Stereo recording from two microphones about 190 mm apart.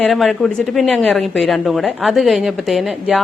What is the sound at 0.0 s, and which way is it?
Speech, centre (ahead or behind).